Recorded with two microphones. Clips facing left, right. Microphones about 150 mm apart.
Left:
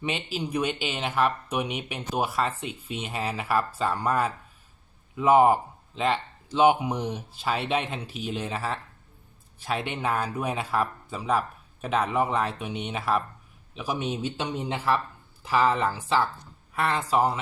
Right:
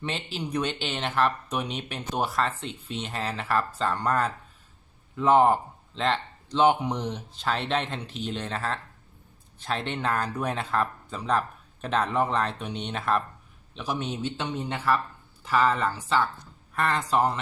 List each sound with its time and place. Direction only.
0.0 s speech: 10° left (ahead or behind)